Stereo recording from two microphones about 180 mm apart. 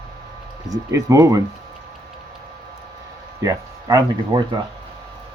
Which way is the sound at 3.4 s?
20° right (ahead or behind).